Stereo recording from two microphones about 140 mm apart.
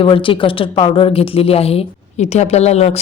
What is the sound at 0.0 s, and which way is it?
A woman's voice, 40° left (ahead or behind).